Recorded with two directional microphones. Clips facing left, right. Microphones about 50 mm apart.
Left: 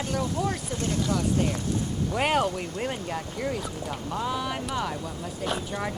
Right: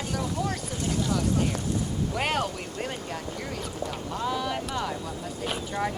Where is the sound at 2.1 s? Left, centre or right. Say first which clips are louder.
Left 5 dB; centre.